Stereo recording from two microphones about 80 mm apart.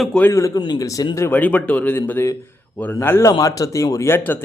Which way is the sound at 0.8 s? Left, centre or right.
Left.